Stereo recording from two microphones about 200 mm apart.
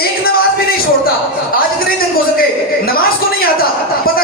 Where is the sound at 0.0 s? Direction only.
50° left (ahead or behind).